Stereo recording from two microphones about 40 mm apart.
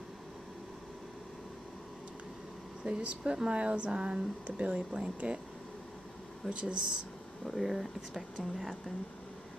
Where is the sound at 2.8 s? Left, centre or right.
Right.